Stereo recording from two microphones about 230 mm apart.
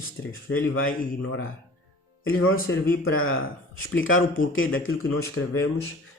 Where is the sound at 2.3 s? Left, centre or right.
Left.